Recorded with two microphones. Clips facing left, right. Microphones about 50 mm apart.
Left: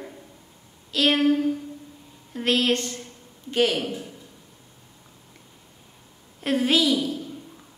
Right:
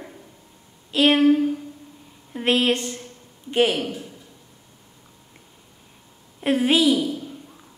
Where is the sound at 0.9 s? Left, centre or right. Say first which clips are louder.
Right 4 dB; right.